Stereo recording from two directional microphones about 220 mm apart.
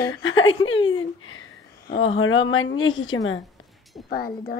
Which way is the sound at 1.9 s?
60° left (ahead or behind).